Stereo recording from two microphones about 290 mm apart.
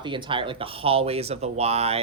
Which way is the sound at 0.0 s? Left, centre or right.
Centre.